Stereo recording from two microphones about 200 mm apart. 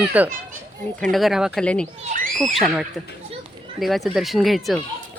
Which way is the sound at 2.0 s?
45° right (ahead or behind).